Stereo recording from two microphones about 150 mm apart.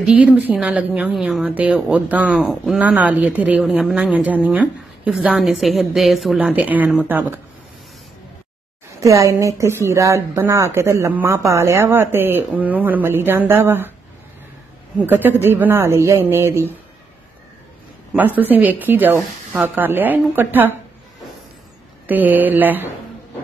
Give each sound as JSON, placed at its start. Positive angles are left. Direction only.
{"t": 0.0, "sound": "speech", "side_deg": -10}
{"t": 9.0, "sound": "speech", "side_deg": -20}
{"t": 15.0, "sound": "speech", "side_deg": -10}
{"t": 18.1, "sound": "speech", "side_deg": -10}
{"t": 22.0, "sound": "speech", "side_deg": -10}